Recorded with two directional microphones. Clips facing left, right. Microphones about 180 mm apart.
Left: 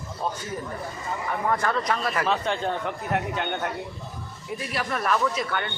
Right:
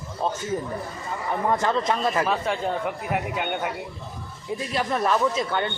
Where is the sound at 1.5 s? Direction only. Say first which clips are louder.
Right 2 dB; 25° right (ahead or behind).